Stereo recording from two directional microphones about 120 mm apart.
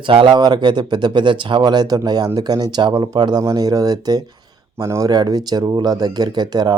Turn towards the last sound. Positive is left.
turn(degrees=-35)  # may be behind; listen again after turning